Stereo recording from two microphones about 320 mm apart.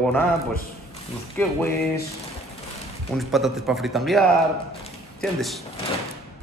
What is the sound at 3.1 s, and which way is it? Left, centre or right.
A man's voice, centre.